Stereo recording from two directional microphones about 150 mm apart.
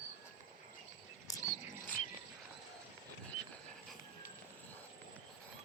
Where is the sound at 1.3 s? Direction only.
25° left (ahead or behind).